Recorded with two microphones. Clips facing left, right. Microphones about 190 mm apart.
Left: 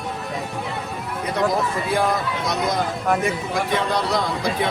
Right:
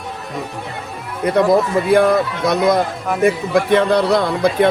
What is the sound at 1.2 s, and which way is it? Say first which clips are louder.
A man's voice: right 8 dB; 60° right (ahead or behind).